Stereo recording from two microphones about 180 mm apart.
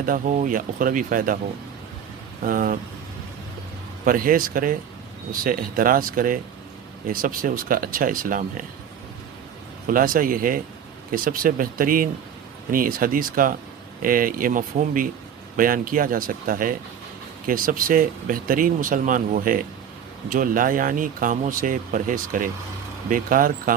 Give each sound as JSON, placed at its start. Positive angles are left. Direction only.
{"t": 0.0, "sound": "speech", "side_deg": -45}
{"t": 2.4, "sound": "speech", "side_deg": -50}
{"t": 4.0, "sound": "speech", "side_deg": -50}
{"t": 9.8, "sound": "speech", "side_deg": -50}